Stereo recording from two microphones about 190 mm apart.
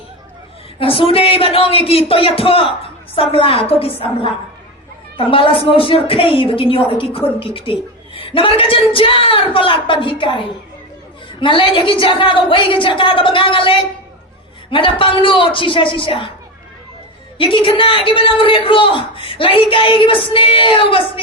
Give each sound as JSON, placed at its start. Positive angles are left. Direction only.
{"t": 0.8, "sound": "a man's voice", "side_deg": 30}
{"t": 17.3, "sound": "a man's voice", "side_deg": 25}